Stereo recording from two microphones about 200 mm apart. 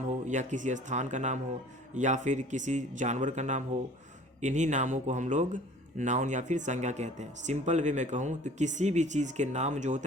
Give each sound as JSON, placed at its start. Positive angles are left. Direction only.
{"t": 0.3, "sound": "speech", "side_deg": -40}